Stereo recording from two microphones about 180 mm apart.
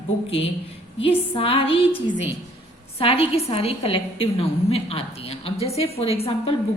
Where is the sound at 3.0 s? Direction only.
30° left (ahead or behind).